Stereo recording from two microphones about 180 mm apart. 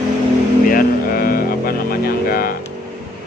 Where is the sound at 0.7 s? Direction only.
55° left (ahead or behind).